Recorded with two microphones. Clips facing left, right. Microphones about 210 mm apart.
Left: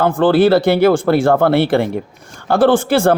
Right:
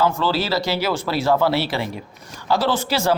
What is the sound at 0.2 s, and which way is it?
Speech, 55° left (ahead or behind).